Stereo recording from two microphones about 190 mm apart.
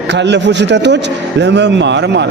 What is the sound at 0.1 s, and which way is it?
Speech, 65° right (ahead or behind).